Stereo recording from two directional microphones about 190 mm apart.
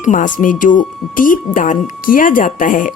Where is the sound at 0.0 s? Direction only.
40° left (ahead or behind).